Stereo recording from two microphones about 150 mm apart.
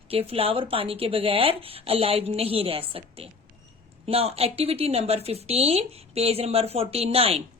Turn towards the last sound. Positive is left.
turn(degrees=-40)  # may be behind; listen again after turning